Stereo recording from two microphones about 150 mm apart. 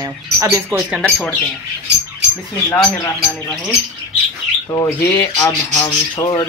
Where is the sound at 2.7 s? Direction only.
15° left (ahead or behind).